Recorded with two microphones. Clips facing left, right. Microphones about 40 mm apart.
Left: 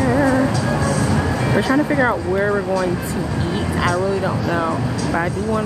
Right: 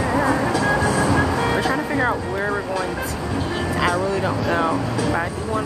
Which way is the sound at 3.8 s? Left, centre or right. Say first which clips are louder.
Left 1 dB; centre.